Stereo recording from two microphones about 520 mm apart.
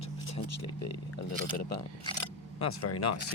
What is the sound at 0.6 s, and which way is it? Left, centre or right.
Speech, left.